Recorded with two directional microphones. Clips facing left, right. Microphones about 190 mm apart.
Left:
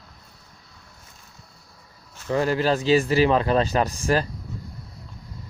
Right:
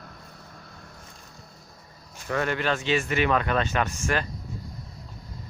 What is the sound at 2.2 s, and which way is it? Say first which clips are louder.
Speech: left 5 dB; 30° left (ahead or behind).